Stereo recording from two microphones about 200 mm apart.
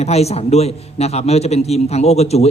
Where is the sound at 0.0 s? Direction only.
30° left (ahead or behind).